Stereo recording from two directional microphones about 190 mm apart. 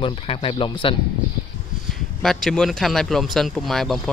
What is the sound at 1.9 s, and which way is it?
Speech, centre (ahead or behind).